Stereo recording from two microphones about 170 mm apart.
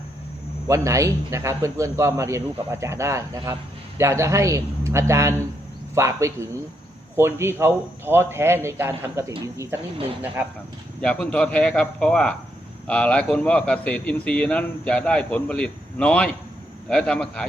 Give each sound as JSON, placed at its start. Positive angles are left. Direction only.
{"t": 0.7, "sound": "a man's voice", "side_deg": -20}
{"t": 11.0, "sound": "a man's voice", "side_deg": 5}